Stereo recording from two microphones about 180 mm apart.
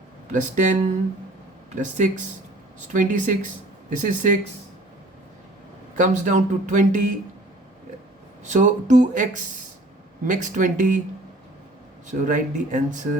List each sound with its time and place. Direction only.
0.3 s speech: 45° right (ahead or behind)
6.0 s speech: 45° right (ahead or behind)
8.4 s speech: 45° right (ahead or behind)
10.2 s speech: 45° right (ahead or behind)
12.0 s speech: 45° right (ahead or behind)